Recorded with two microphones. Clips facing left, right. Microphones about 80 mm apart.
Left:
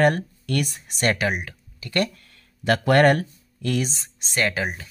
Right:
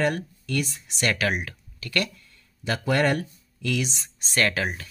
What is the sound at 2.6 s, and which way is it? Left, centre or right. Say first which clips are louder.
Speech: left 6 dB; left.